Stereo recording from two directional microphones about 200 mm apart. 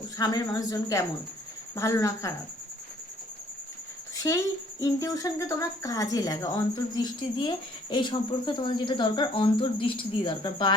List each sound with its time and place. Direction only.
0.2 s speech: 20° left (ahead or behind)
4.2 s speech: 15° left (ahead or behind)